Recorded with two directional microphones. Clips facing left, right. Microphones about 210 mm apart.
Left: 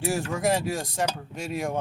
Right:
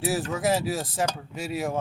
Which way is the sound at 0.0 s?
Centre (ahead or behind).